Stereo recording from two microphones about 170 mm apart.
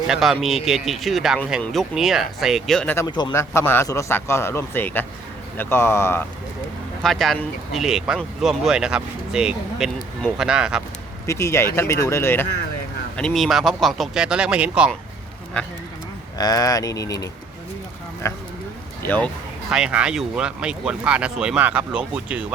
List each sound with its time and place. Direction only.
0.1 s speech: centre (ahead or behind)
3.1 s a man's voice: 25° left (ahead or behind)
7.0 s speech: centre (ahead or behind)
11.3 s a man's voice: 15° left (ahead or behind)
13.1 s speech: 5° left (ahead or behind)
16.4 s speech: 20° left (ahead or behind)
18.2 s a man's voice: 15° left (ahead or behind)
19.7 s speech: 5° right (ahead or behind)